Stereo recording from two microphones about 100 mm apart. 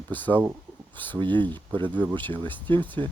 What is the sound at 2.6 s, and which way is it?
Speech, 55° right (ahead or behind).